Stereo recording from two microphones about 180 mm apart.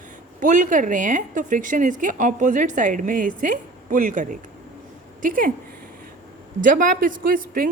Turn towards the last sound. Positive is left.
turn(degrees=-50)  # may be behind; listen again after turning